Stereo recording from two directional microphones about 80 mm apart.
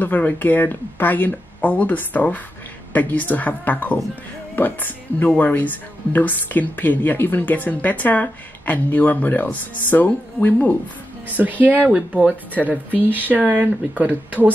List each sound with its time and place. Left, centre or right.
0.0 s speech: left
11.2 s speech: right